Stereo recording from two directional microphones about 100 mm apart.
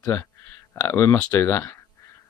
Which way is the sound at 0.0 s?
25° left (ahead or behind).